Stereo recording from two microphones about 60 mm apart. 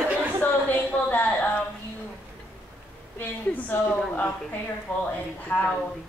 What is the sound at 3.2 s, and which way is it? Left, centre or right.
A woman's voice, left.